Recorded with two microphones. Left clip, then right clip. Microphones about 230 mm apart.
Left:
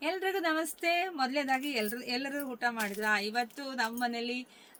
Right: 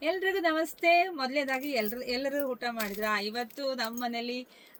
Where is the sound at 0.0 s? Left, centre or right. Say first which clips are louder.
Right 3 dB; centre.